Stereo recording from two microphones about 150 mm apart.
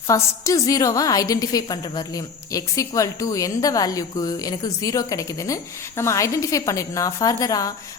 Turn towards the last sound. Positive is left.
turn(degrees=25)  # may be behind; listen again after turning